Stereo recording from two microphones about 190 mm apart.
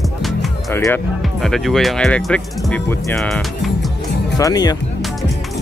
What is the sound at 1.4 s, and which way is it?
Speech, centre (ahead or behind).